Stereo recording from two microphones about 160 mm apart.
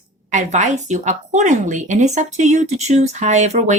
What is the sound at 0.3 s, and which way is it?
A woman's voice, 50° right (ahead or behind).